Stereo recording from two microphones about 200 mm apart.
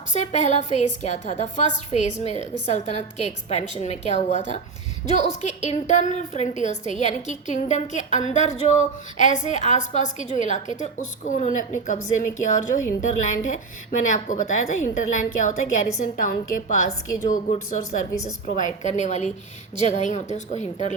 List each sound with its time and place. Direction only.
0.1 s a woman's voice: 35° left (ahead or behind)